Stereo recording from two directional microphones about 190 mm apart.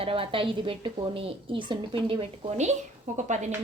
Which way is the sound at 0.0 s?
30° right (ahead or behind).